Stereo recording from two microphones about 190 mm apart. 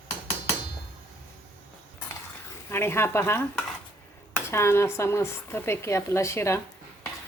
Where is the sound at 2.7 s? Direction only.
15° left (ahead or behind).